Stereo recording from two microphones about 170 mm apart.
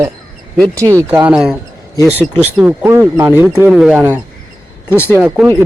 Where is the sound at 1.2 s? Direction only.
5° right (ahead or behind).